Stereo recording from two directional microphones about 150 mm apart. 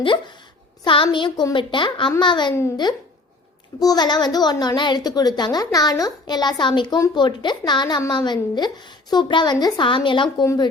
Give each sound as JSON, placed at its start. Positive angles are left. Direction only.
{"t": 0.9, "sound": "a child's voice", "side_deg": 35}
{"t": 3.8, "sound": "a child's voice", "side_deg": 25}
{"t": 10.4, "sound": "a child's voice", "side_deg": 20}